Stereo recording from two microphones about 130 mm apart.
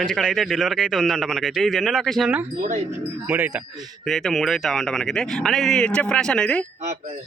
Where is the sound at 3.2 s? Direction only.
15° right (ahead or behind).